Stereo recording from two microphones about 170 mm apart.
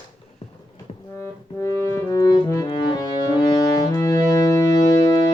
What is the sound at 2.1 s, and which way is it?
Music, 20° left (ahead or behind).